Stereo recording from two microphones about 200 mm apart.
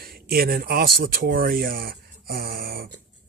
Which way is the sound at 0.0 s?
50° right (ahead or behind).